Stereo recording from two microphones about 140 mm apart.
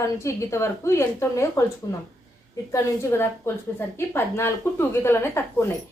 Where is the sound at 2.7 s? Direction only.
15° left (ahead or behind).